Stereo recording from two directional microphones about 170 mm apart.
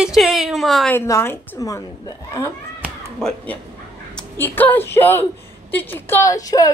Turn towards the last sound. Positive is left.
turn(degrees=20)  # may be behind; listen again after turning